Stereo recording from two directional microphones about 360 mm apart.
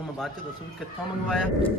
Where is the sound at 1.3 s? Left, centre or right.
Centre.